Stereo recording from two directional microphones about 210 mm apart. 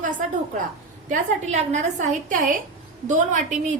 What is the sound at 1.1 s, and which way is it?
A woman's voice, 35° right (ahead or behind).